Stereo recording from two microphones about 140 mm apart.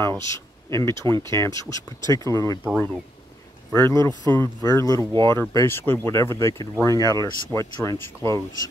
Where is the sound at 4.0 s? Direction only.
30° right (ahead or behind).